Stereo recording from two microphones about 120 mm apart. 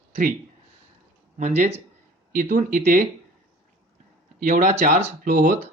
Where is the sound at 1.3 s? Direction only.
70° right (ahead or behind).